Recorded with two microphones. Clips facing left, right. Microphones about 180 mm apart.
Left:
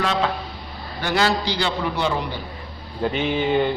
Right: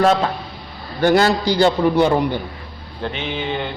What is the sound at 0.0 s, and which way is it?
A man's voice, 45° right (ahead or behind).